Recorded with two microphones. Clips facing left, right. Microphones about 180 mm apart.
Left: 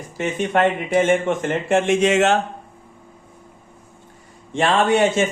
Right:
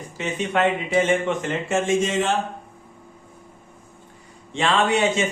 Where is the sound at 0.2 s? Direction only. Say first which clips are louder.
Left 3 dB; 50° left (ahead or behind); by 2.4 s 75° left (ahead or behind).